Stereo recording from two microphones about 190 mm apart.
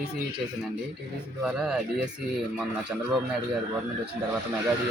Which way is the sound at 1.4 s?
5° right (ahead or behind).